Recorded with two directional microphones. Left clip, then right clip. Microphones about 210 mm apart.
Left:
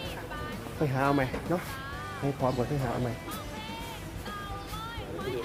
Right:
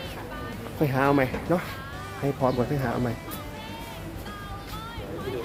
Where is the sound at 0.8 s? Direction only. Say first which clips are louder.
Right 5 dB; 40° right (ahead or behind); by 2.9 s 20° right (ahead or behind).